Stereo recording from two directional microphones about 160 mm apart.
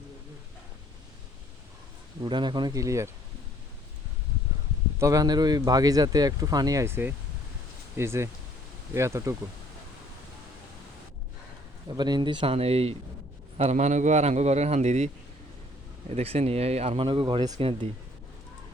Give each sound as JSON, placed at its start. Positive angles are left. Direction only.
{"t": 2.2, "sound": "a man's voice", "side_deg": -30}
{"t": 4.9, "sound": "a man's voice", "side_deg": -20}
{"t": 11.9, "sound": "a man's voice", "side_deg": -25}